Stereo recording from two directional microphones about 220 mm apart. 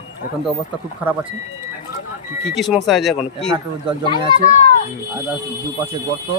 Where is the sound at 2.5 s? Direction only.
Centre (ahead or behind).